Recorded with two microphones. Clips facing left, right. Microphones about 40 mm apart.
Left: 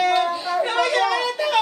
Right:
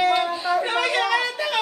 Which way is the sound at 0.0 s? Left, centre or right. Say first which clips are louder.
Left 1 dB; centre.